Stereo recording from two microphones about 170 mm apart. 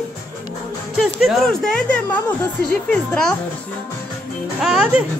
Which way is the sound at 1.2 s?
5° left (ahead or behind).